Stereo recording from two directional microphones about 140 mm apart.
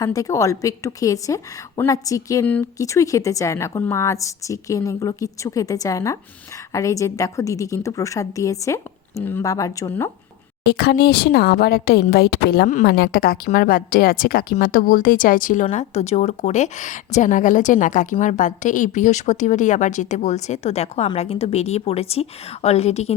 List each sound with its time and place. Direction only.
0.0 s a woman's voice: 25° left (ahead or behind)
11.9 s a woman's voice: 90° left; by 23.1 s 50° left (ahead or behind)